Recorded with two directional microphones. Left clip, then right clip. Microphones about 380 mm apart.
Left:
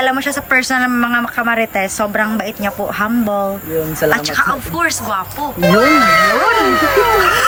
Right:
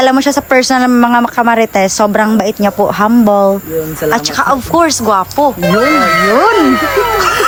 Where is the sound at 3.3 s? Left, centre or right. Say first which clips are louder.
Right 9 dB; left.